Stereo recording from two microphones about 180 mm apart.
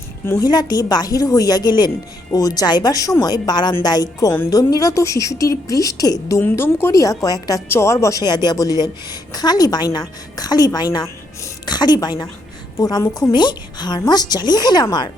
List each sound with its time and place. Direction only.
0.3 s a woman's voice: 20° left (ahead or behind)